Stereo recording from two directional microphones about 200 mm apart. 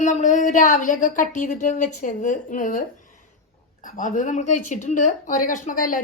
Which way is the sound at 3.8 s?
40° left (ahead or behind).